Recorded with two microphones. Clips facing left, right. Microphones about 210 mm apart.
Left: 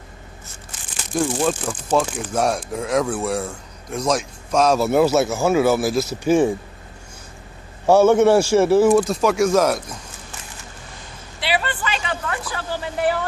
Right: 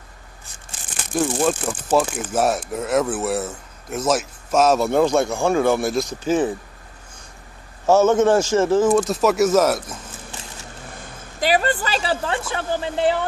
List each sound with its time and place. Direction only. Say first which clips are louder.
1.1 s speech: even; 5° right (ahead or behind)
7.8 s speech: left 2 dB; 15° left (ahead or behind)
9.0 s speech: right 1 dB; centre (ahead or behind)
11.3 s a woman's voice: right 5 dB; 45° right (ahead or behind); by 13.2 s 25° right (ahead or behind)